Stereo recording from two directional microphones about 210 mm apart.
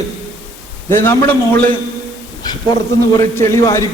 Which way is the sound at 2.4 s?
20° left (ahead or behind).